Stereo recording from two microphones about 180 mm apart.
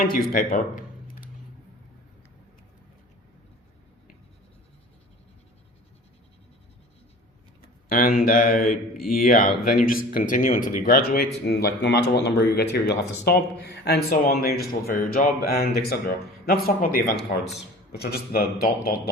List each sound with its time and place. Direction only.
0.0 s speech: 55° left (ahead or behind)
7.9 s a man's voice: 50° left (ahead or behind)
8.2 s mantra: 50° left (ahead or behind)
9.6 s speech: 50° left (ahead or behind)